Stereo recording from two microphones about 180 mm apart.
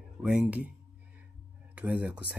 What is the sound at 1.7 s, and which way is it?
Speech, 10° right (ahead or behind).